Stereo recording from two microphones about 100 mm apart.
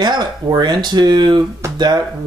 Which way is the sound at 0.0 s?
45° right (ahead or behind).